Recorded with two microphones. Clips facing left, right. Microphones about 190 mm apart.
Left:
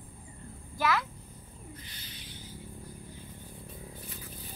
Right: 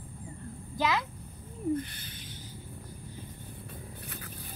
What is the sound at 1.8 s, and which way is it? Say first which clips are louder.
Bird: right 13 dB; 55° right (ahead or behind).